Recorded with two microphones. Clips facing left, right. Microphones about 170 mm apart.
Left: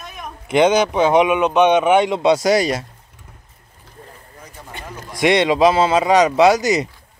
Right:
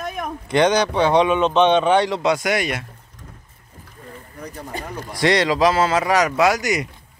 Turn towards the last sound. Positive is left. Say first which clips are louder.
# left 5 dB
turn(degrees=30)  # may be behind; listen again after turning